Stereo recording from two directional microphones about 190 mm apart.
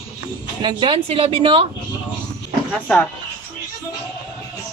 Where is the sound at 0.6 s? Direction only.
25° right (ahead or behind).